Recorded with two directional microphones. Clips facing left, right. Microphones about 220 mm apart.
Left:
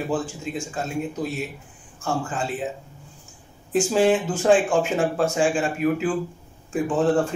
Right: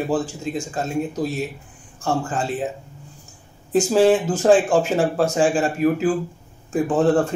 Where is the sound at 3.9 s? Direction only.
40° right (ahead or behind).